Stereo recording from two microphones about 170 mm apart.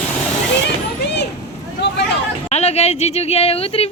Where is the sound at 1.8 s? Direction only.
75° left (ahead or behind).